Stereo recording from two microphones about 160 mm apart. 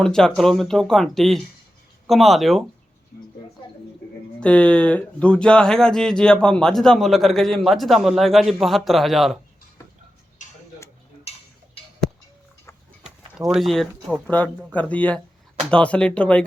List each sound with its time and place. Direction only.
0.0 s speech: 5° left (ahead or behind)
4.4 s speech: 5° left (ahead or behind)
10.4 s tick-tock: 50° left (ahead or behind)
13.5 s speech: centre (ahead or behind)